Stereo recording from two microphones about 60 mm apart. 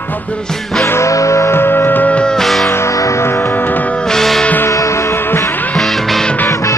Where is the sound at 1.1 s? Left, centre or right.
Left.